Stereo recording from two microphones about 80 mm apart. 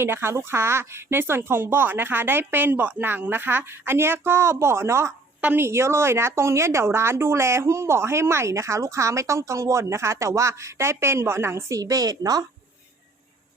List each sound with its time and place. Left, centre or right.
0.0 s a woman's voice: right
11.8 s a woman's voice: right